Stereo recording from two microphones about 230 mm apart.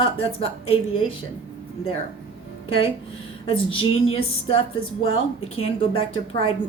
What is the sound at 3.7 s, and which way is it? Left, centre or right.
Speech, left.